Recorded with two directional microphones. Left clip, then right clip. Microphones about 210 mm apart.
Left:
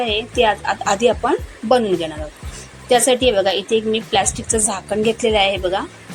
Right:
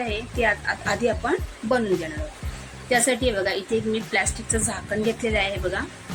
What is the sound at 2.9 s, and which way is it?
A woman's voice, 10° left (ahead or behind).